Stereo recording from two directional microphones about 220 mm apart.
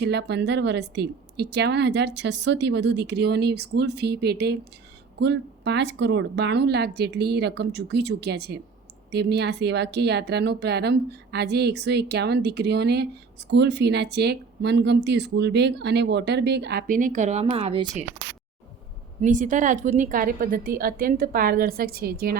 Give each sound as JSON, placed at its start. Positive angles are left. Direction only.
{"t": 0.0, "sound": "speech", "side_deg": -50}
{"t": 19.2, "sound": "a woman's voice", "side_deg": -35}